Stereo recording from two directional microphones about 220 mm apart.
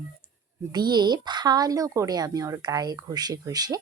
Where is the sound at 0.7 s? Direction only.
20° right (ahead or behind).